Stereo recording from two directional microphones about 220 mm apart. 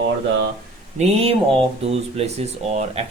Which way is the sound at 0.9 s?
30° right (ahead or behind).